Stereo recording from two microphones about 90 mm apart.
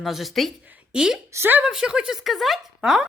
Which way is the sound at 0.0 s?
Centre (ahead or behind).